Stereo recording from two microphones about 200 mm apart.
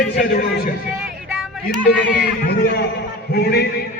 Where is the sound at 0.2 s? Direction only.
50° left (ahead or behind).